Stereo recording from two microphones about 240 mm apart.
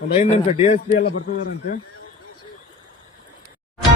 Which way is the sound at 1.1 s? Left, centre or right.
Left.